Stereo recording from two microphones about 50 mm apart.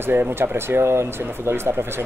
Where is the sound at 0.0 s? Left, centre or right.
Right.